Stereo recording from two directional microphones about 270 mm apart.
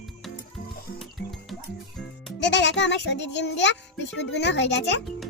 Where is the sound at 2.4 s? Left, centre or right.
Left.